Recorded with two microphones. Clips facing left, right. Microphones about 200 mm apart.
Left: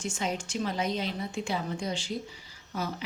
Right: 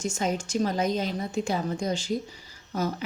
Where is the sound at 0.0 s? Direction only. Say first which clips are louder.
Right 4 dB; 40° right (ahead or behind).